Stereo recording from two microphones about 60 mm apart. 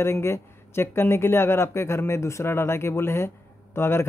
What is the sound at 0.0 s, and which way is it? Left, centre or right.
Speech, left.